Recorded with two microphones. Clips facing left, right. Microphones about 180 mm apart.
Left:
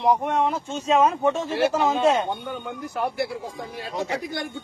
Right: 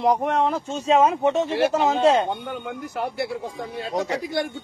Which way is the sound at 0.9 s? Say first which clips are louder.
Right 2 dB; 20° right (ahead or behind).